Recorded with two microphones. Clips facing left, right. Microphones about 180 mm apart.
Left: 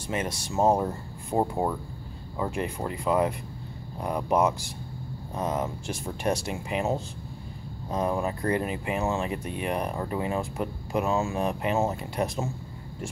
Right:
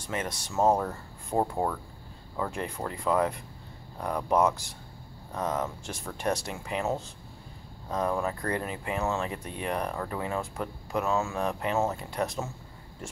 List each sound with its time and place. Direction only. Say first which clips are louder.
0.1 s speech: left 3 dB; 10° left (ahead or behind)